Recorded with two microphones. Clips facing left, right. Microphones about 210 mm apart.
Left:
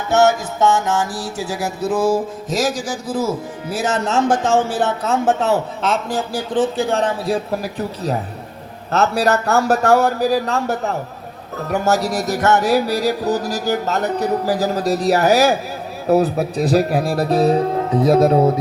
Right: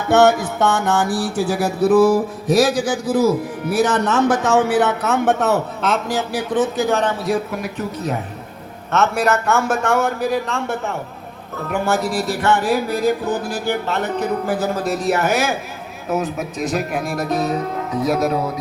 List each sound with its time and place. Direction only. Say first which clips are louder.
0.1 s mantra: right 2 dB; 60° right (ahead or behind)
4.3 s mantra: right 1 dB; 60° right (ahead or behind)
5.0 s music: even; 30° left (ahead or behind)